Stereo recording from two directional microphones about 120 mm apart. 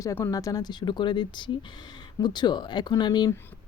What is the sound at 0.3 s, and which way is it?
Speech, 30° left (ahead or behind).